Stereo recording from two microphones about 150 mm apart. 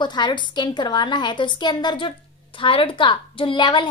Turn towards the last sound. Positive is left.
turn(degrees=30)  # may be behind; listen again after turning